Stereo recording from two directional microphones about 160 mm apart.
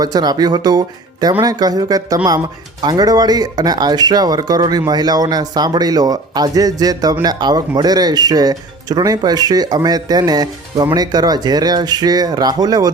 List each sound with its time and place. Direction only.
0.0 s speech: 25° right (ahead or behind)